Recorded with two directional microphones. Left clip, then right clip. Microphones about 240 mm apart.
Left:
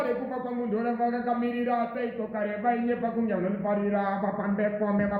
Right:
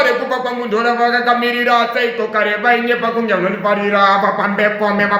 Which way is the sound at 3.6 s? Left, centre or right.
Centre.